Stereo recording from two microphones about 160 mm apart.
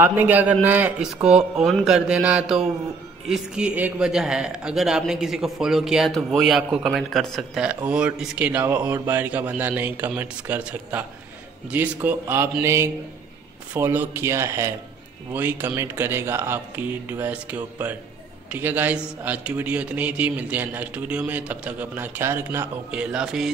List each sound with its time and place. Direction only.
0.0 s a man's voice: 10° right (ahead or behind)